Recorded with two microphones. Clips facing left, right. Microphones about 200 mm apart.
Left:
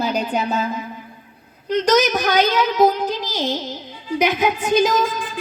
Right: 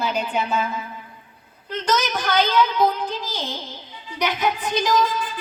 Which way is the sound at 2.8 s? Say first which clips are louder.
Left 5 dB; 40° left (ahead or behind).